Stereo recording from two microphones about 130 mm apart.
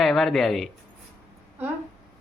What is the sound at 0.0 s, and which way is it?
Speech, centre (ahead or behind).